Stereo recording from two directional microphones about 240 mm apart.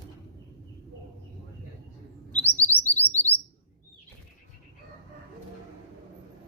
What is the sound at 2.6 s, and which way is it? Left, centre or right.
Chirp, centre.